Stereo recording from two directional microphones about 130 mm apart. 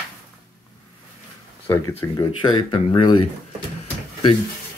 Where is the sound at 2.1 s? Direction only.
35° left (ahead or behind).